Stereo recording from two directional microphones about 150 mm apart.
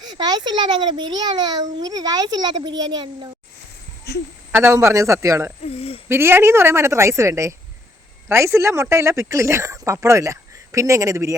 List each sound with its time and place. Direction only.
0.0 s a child's voice: 30° right (ahead or behind)
4.1 s speech: 90° left
4.5 s a child's voice: 20° right (ahead or behind)
5.6 s speech: 40° left (ahead or behind)
6.1 s a woman's voice: 15° right (ahead or behind)